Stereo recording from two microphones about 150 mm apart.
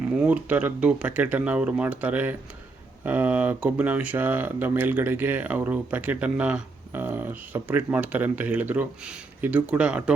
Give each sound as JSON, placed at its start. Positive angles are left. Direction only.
{"t": 0.1, "sound": "speech", "side_deg": -10}